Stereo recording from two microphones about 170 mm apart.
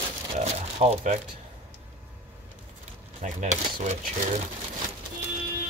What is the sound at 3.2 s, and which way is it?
Speech, 45° right (ahead or behind).